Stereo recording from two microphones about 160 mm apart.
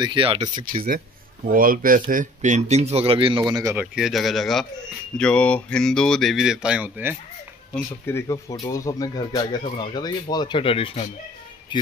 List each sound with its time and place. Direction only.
0.0 s speech: 30° right (ahead or behind)
1.5 s speech: 60° right (ahead or behind); by 3.7 s 25° right (ahead or behind)
3.7 s speech: 5° right (ahead or behind)
7.7 s speech: 20° left (ahead or behind)